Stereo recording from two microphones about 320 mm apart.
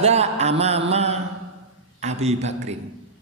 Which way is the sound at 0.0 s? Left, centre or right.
Centre.